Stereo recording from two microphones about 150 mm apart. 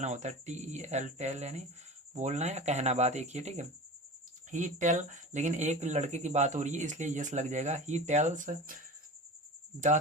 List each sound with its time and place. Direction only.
0.0 s speech: 50° right (ahead or behind)